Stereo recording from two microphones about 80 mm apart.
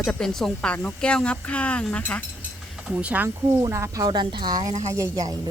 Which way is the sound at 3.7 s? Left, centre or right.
Right.